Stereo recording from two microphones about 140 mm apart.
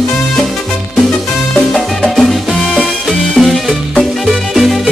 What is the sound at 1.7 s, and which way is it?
Salsa music, centre (ahead or behind).